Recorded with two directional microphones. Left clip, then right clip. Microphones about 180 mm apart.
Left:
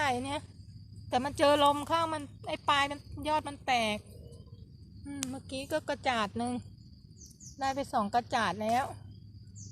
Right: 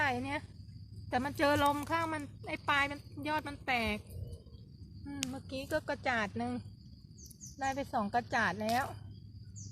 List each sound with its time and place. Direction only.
0.0 s insect: 30° left (ahead or behind)
1.1 s speech: 30° left (ahead or behind)
5.0 s speech: 20° left (ahead or behind)
7.6 s speech: 25° left (ahead or behind)